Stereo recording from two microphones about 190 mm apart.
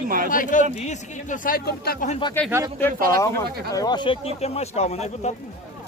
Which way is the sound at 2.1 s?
25° left (ahead or behind).